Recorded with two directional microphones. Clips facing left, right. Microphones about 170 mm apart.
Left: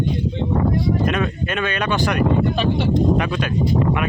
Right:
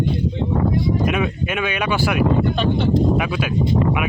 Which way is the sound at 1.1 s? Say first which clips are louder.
Even; 10° right (ahead or behind).